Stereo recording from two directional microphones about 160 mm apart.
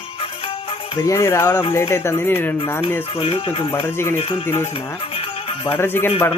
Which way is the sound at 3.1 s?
40° left (ahead or behind).